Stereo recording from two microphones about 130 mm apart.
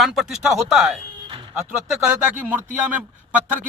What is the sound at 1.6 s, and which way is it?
Speech, 5° right (ahead or behind).